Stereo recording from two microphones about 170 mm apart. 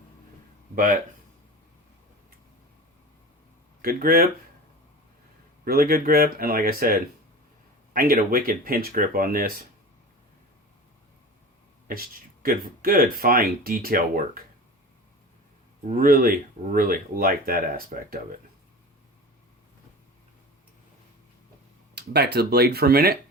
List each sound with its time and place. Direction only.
3.8 s speech: 60° right (ahead or behind)
5.6 s speech: 60° right (ahead or behind)
11.9 s speech: 60° right (ahead or behind)
15.9 s speech: 60° right (ahead or behind)
21.9 s speech: 70° right (ahead or behind)